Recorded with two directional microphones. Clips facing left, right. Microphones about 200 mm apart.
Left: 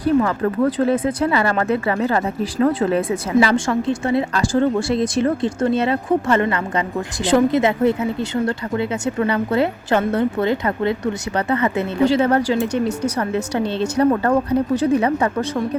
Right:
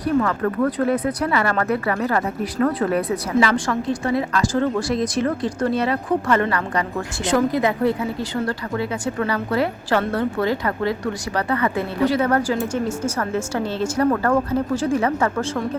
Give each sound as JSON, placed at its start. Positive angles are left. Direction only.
{"t": 0.2, "sound": "speech", "side_deg": 25}